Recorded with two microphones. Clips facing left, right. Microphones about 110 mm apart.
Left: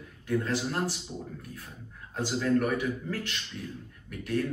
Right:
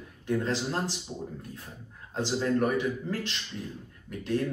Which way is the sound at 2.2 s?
25° right (ahead or behind).